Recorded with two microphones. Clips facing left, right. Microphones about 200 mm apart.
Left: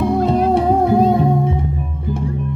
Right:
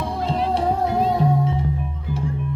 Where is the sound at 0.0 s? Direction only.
50° left (ahead or behind).